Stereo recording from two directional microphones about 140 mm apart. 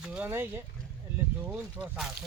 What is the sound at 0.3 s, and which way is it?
Speech, 15° right (ahead or behind).